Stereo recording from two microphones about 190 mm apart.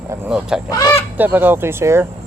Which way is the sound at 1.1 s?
10° right (ahead or behind).